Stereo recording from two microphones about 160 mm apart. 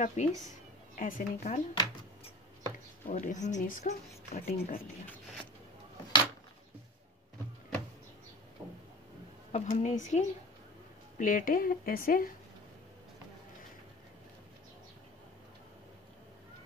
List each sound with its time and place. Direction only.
0.0 s speech: 45° left (ahead or behind)
0.9 s speech: 55° left (ahead or behind)
3.1 s speech: 50° left (ahead or behind)
4.3 s speech: 45° left (ahead or behind)
9.5 s speech: 50° left (ahead or behind)